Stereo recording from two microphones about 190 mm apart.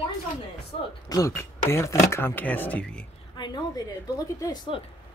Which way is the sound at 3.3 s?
20° left (ahead or behind).